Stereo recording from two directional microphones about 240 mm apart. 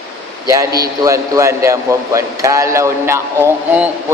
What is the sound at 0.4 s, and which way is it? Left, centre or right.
Speech, centre.